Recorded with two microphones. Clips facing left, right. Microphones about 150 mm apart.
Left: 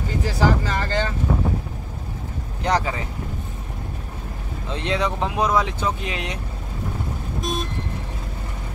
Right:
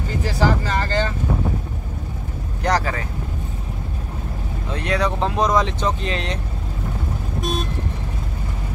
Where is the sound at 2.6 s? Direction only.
20° left (ahead or behind).